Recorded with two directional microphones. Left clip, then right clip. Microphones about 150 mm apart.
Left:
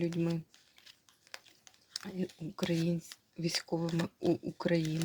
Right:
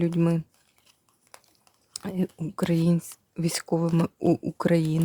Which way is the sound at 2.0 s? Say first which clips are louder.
Right 9 dB; 60° right (ahead or behind).